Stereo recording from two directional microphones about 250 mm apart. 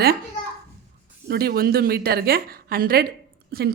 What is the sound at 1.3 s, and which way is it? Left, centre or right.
Speech, right.